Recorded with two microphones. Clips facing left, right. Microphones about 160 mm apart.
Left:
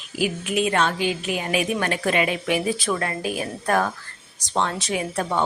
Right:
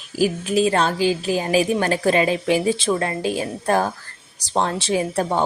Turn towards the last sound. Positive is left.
turn(degrees=-30)  # may be behind; listen again after turning